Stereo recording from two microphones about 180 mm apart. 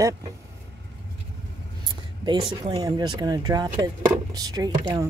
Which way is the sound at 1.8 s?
25° right (ahead or behind).